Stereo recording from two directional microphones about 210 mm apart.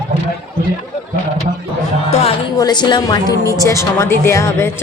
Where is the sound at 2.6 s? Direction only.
20° left (ahead or behind).